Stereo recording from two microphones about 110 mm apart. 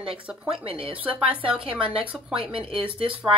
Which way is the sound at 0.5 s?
55° right (ahead or behind).